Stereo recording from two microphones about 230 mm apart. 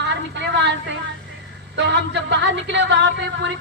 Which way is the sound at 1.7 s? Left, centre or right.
Right.